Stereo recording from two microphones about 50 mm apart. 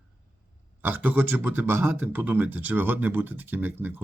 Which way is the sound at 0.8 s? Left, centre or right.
Right.